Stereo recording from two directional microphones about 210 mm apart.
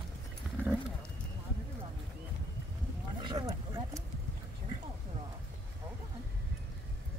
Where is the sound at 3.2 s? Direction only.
20° right (ahead or behind).